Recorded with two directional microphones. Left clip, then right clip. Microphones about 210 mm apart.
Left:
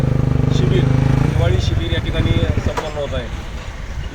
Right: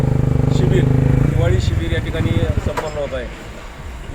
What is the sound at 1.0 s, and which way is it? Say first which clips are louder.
Vehicle: even; 20° left (ahead or behind).